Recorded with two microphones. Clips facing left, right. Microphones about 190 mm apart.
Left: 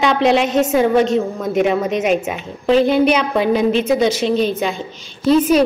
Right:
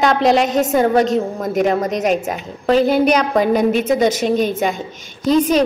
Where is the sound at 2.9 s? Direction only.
45° right (ahead or behind).